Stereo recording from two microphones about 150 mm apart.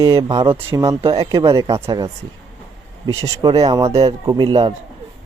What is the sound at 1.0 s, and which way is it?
Speech, 45° right (ahead or behind).